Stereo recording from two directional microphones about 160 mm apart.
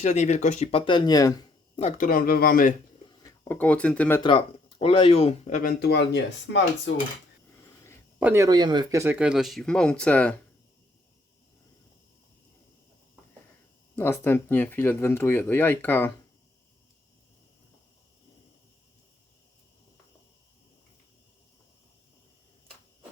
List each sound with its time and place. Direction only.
0.0 s speech: 45° left (ahead or behind); by 1.8 s 25° left (ahead or behind)
1.8 s speech: 55° left (ahead or behind)
3.5 s speech: 10° left (ahead or behind)
4.2 s speech: 30° left (ahead or behind); by 5.7 s 50° left (ahead or behind)
5.8 s speech: 90° left
8.2 s speech: 15° right (ahead or behind)
9.1 s speech: 5° right (ahead or behind)
13.9 s speech: 15° left (ahead or behind)